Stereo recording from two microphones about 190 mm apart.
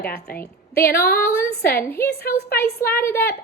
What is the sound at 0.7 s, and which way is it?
A woman's voice, 15° left (ahead or behind).